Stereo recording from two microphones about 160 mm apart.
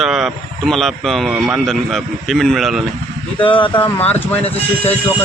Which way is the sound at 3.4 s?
30° left (ahead or behind).